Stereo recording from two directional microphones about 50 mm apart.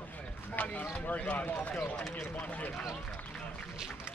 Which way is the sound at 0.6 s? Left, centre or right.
Left.